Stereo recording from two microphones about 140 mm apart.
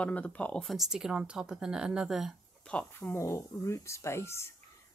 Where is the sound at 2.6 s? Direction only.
10° left (ahead or behind).